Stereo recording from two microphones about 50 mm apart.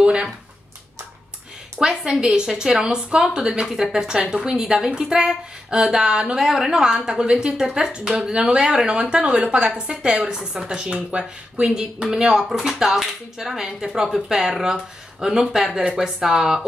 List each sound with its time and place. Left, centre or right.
0.0 s speech: right
1.8 s a woman's voice: centre
3.6 s a woman's voice: centre